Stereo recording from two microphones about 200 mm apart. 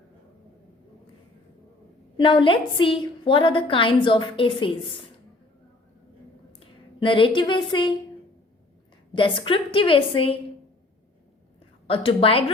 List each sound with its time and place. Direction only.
2.1 s a woman's voice: 25° left (ahead or behind)
6.6 s speech: 25° left (ahead or behind)
9.1 s a woman's voice: 25° left (ahead or behind)
11.9 s a woman's voice: 30° left (ahead or behind)